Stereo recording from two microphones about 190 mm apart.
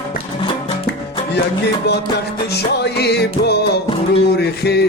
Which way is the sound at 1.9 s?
60° left (ahead or behind).